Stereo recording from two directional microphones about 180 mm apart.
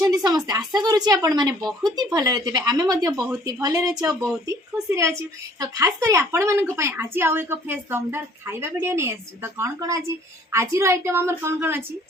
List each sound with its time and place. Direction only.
0.0 s a woman's voice: 20° right (ahead or behind)